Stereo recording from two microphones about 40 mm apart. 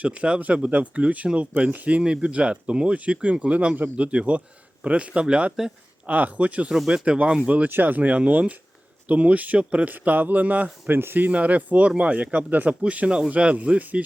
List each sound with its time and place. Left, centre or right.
0.0 s speech: right
6.1 s speech: right
6.9 s speech: right
7.7 s speech: right
9.9 s a man's voice: right
10.8 s speech: right
11.3 s speech: right